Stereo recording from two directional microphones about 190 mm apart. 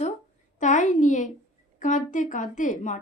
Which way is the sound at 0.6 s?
40° left (ahead or behind).